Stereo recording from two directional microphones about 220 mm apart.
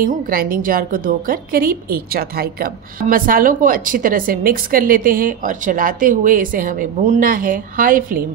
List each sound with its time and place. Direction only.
0.0 s a woman's voice: 40° right (ahead or behind)